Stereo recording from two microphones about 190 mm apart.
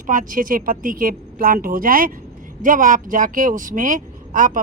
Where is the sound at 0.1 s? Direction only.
45° right (ahead or behind).